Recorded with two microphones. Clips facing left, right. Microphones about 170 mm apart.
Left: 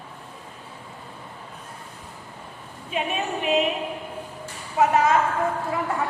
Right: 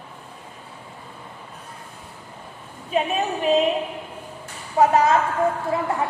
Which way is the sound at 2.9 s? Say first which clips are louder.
Right 4 dB; 35° right (ahead or behind).